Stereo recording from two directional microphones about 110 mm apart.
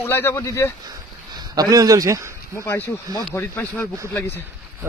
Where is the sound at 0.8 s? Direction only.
35° right (ahead or behind).